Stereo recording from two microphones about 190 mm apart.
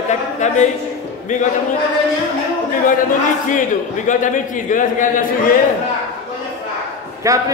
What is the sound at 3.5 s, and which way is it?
A man's voice, 40° left (ahead or behind).